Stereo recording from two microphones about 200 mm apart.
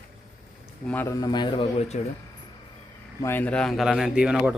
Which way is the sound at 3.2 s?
10° left (ahead or behind).